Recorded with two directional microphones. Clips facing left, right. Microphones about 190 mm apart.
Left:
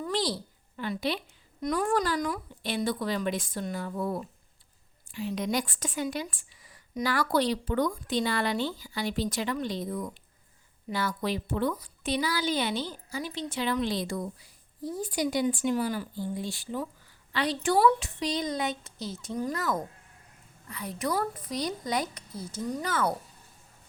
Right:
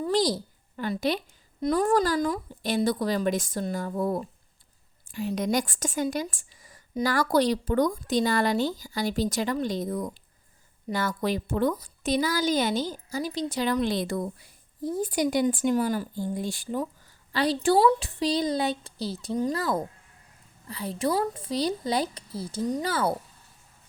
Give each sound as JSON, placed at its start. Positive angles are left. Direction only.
{"t": 0.1, "sound": "a sound", "side_deg": -40}
{"t": 0.8, "sound": "a woman's voice", "side_deg": -45}
{"t": 17.3, "sound": "speech", "side_deg": -35}